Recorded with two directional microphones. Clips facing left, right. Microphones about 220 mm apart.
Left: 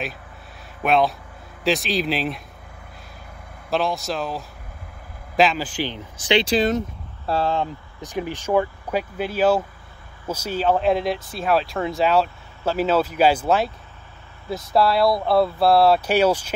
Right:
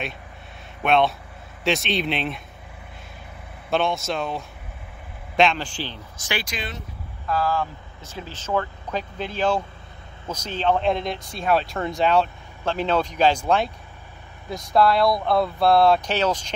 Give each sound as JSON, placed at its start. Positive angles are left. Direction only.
{"t": 0.8, "sound": "speech", "side_deg": 0}
{"t": 3.7, "sound": "speech", "side_deg": 0}
{"t": 6.4, "sound": "speech", "side_deg": 35}
{"t": 7.2, "sound": "speech", "side_deg": 25}